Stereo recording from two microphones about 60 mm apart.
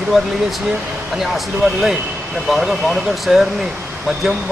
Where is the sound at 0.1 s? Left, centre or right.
Centre.